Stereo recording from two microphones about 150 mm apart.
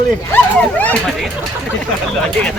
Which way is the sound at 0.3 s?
10° left (ahead or behind).